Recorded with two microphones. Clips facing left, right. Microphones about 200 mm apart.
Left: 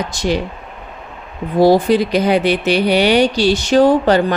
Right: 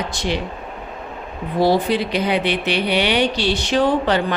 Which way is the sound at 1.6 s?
45° left (ahead or behind).